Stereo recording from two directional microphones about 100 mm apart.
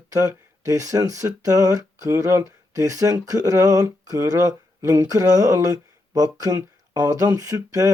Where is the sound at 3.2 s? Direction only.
35° right (ahead or behind).